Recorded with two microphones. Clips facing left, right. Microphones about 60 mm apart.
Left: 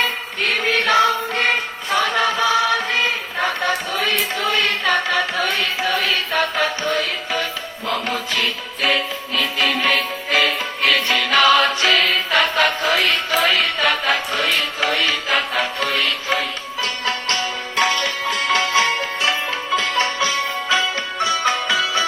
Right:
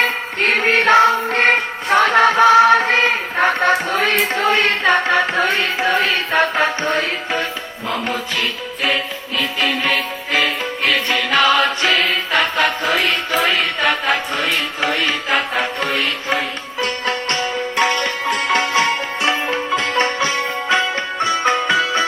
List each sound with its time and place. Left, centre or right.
0.0 s music: right
7.9 s music: centre
18.3 s music: right